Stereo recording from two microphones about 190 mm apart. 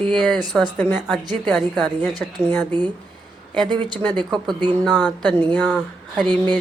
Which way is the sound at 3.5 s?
20° right (ahead or behind).